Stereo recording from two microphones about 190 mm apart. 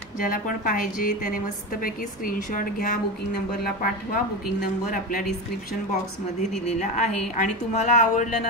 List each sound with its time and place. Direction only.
0.2 s a woman's voice: 45° left (ahead or behind)
6.8 s a woman's voice: 40° left (ahead or behind)